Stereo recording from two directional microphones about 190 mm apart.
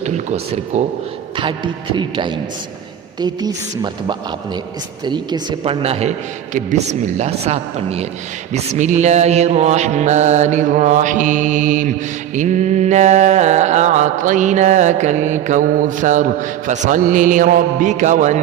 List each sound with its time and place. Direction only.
0.0 s mantra: 35° right (ahead or behind)
1.4 s speech: 25° right (ahead or behind)
5.0 s mantra: 25° right (ahead or behind); by 18.3 s 40° right (ahead or behind)